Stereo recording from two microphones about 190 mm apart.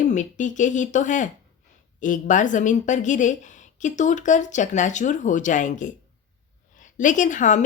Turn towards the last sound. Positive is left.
turn(degrees=40)  # may be behind; listen again after turning